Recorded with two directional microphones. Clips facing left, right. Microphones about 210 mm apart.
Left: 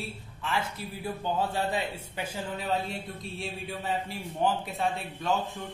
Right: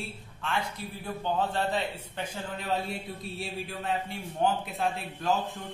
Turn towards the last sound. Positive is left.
turn(degrees=0)  # may be behind; listen again after turning